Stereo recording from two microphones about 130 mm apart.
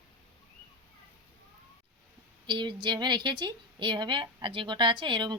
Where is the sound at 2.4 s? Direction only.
35° right (ahead or behind).